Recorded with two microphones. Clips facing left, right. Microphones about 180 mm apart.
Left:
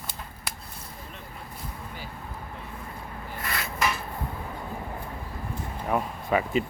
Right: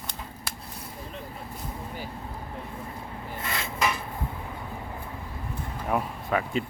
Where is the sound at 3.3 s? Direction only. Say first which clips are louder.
Even; 25° right (ahead or behind).